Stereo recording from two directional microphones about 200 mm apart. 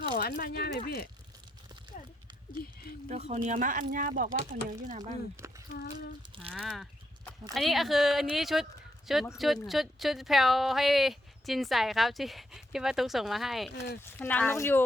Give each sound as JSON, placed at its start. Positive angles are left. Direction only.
{"t": 0.2, "sound": "speech", "side_deg": 50}
{"t": 3.1, "sound": "speech", "side_deg": -35}
{"t": 6.5, "sound": "speech", "side_deg": 0}